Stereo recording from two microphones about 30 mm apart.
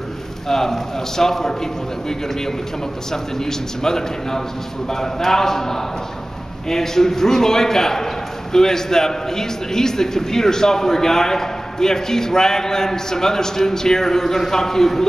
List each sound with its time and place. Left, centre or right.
0.5 s a man's voice: centre